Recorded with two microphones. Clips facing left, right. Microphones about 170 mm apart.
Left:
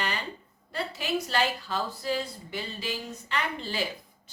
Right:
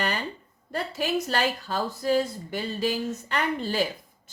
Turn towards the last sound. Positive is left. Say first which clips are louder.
# right 5 dB
turn(degrees=-40)  # may be behind; listen again after turning